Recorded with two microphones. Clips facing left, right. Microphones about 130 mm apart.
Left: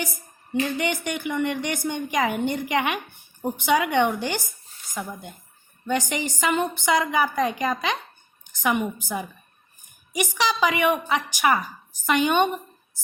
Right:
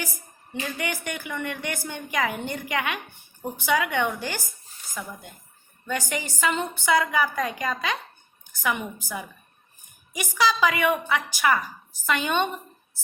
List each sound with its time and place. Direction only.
0.8 s a woman's voice: 20° left (ahead or behind)
5.9 s a woman's voice: 20° left (ahead or behind)
10.2 s a woman's voice: 20° left (ahead or behind)